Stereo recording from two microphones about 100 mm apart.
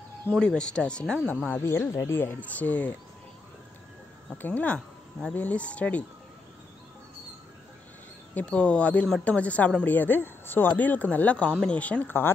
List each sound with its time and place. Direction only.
0.4 s speech: 10° left (ahead or behind)
1.5 s speech: 25° left (ahead or behind)
4.3 s speech: 15° left (ahead or behind)
8.4 s speech: 10° left (ahead or behind)